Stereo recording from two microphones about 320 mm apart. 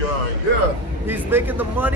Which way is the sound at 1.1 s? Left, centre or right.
Centre.